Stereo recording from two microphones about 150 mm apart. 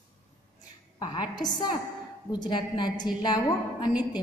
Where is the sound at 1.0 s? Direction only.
25° left (ahead or behind).